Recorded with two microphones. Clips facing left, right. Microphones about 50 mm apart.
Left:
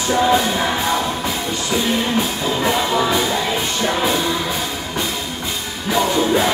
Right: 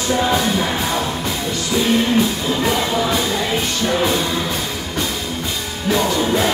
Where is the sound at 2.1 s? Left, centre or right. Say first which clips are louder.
Right 2 dB; centre.